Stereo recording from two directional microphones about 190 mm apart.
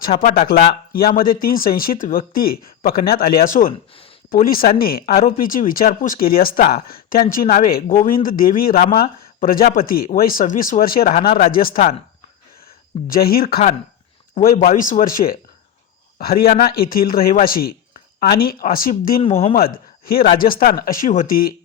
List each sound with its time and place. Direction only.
0.2 s speech: 50° left (ahead or behind)
13.1 s speech: 50° left (ahead or behind)
14.8 s speech: 45° left (ahead or behind)
19.2 s speech: 30° left (ahead or behind)
19.5 s speech: 50° left (ahead or behind)